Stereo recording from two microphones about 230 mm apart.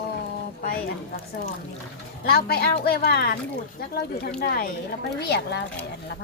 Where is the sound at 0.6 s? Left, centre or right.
Left.